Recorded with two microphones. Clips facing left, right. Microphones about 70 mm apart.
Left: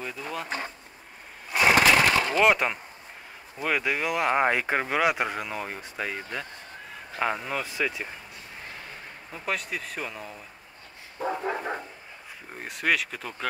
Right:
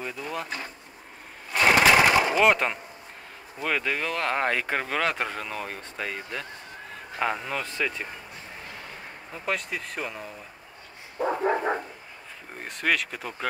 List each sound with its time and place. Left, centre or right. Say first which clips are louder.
0.2 s a sound: right 1 dB; centre
1.5 s sewing machine: even; centre
2.0 s a sound: right 2 dB; centre
2.4 s speech: even; centre
9.3 s speech: right 1 dB; centre
11.1 s dog: right 4 dB; right
12.5 s speech: even; centre